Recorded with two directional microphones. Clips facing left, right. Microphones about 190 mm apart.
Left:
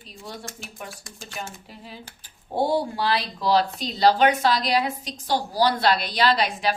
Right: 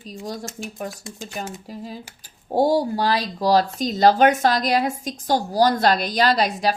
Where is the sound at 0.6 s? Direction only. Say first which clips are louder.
Right 8 dB; 40° right (ahead or behind).